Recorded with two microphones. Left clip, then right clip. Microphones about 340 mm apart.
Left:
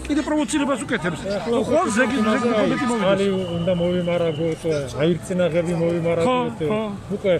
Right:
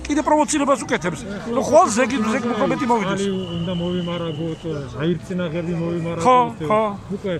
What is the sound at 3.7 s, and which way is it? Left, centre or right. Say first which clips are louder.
Speech: left 6 dB; centre.